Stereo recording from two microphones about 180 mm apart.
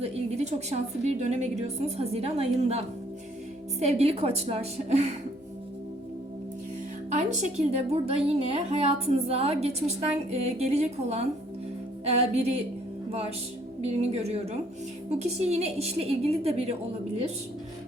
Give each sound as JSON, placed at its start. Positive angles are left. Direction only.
{"t": 0.0, "sound": "a sound", "side_deg": -35}
{"t": 1.0, "sound": "a woman's voice", "side_deg": -40}
{"t": 7.1, "sound": "a woman's voice", "side_deg": -40}
{"t": 13.8, "sound": "a woman's voice", "side_deg": -35}